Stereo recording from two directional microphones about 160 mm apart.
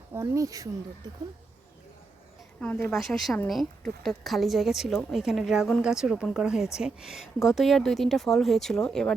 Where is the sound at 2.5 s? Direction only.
10° left (ahead or behind).